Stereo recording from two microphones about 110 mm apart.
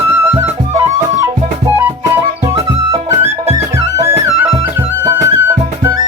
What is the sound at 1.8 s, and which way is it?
Music, 20° right (ahead or behind).